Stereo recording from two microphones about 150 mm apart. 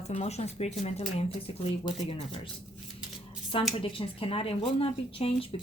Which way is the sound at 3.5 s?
35° left (ahead or behind).